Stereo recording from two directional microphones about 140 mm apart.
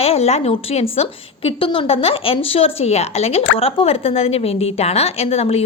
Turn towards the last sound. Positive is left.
turn(degrees=45)  # may be behind; listen again after turning